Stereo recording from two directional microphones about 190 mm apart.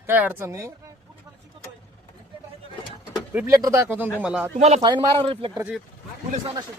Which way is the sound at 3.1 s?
10° right (ahead or behind).